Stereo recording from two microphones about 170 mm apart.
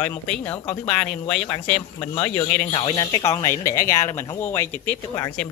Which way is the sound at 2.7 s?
25° left (ahead or behind).